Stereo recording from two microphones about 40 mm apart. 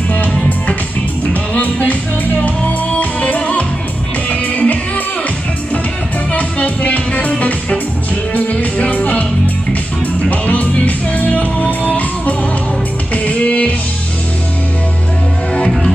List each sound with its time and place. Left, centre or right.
1.3 s music: left
6.3 s music: left
10.3 s music: left
13.1 s music: left